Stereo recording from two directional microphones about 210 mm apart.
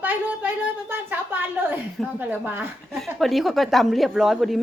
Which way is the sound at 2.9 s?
Centre (ahead or behind).